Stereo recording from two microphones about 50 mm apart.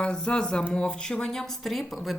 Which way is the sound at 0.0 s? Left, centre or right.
Centre.